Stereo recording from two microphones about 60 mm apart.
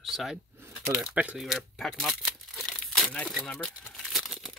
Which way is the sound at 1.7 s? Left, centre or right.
Centre.